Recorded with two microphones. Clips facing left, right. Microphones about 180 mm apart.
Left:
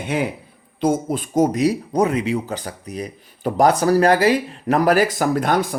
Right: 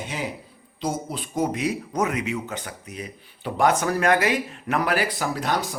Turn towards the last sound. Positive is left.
turn(degrees=55)  # may be behind; listen again after turning